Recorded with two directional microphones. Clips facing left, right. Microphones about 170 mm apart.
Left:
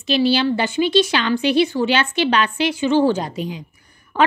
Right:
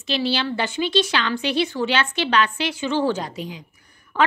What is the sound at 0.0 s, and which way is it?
A woman's voice, 10° left (ahead or behind).